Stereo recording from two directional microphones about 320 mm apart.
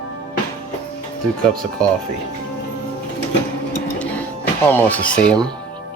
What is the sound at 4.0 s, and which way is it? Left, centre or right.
Music, centre.